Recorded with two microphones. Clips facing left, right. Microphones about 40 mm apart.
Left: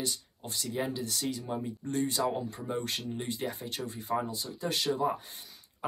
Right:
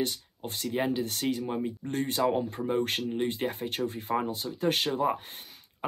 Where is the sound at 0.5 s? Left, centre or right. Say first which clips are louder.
Right 4 dB; right.